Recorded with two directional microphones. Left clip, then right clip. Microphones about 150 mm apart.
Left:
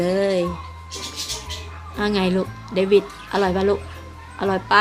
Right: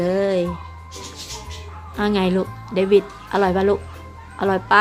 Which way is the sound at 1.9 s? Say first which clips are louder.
Right 1 dB; centre (ahead or behind).